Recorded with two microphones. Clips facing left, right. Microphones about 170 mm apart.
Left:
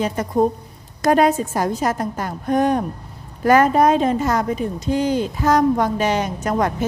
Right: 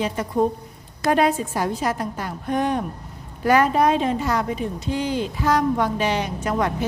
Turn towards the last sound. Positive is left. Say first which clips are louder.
# left 3 dB
turn(degrees=45)  # may be behind; listen again after turning